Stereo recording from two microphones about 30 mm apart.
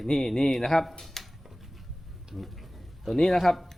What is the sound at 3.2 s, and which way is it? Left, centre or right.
Speech, centre.